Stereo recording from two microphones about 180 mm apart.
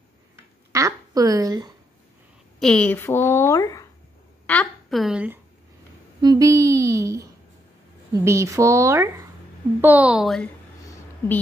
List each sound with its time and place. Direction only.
0.7 s speech: 20° right (ahead or behind)
2.6 s a woman's voice: 5° left (ahead or behind)
4.5 s a woman's voice: 5° left (ahead or behind)
6.2 s a woman's voice: 20° right (ahead or behind); by 10.5 s centre (ahead or behind)